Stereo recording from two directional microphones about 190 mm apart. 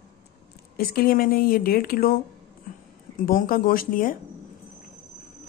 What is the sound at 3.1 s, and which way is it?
Speech, 50° left (ahead or behind).